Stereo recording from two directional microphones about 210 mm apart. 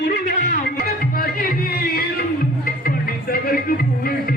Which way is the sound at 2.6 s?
45° left (ahead or behind).